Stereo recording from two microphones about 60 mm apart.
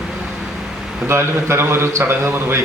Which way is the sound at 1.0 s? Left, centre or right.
Right.